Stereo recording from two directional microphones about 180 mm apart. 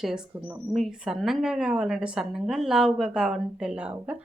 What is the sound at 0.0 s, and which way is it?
Speech, 5° right (ahead or behind).